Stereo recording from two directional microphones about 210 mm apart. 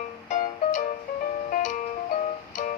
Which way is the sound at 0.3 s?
35° left (ahead or behind).